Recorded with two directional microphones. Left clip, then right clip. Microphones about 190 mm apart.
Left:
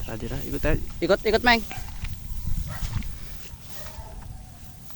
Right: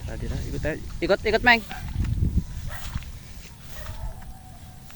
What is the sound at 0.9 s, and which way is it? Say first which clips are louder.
Speech: even; 20° left (ahead or behind).